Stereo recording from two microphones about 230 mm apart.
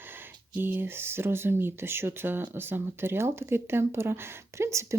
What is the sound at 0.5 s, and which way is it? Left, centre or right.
Speech, centre.